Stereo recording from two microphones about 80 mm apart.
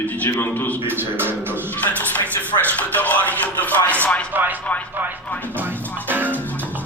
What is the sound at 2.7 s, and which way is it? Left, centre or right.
Speech, centre.